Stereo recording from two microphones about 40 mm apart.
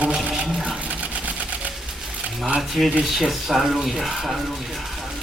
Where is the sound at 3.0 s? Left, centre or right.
Centre.